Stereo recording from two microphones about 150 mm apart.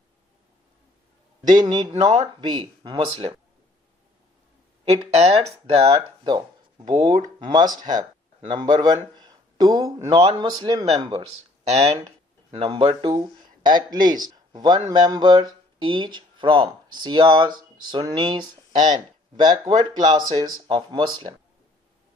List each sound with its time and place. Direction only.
1.5 s speech: 30° right (ahead or behind)
4.9 s speech: 45° right (ahead or behind)
6.3 s a sound: 30° right (ahead or behind)
7.0 s speech: 30° right (ahead or behind)
11.7 s speech: 45° right (ahead or behind)